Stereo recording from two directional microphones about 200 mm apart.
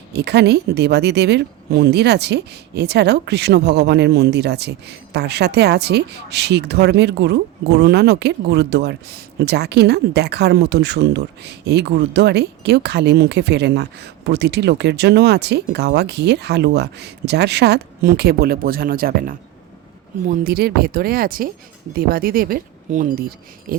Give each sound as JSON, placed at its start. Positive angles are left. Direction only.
{"t": 0.1, "sound": "a woman's voice", "side_deg": -55}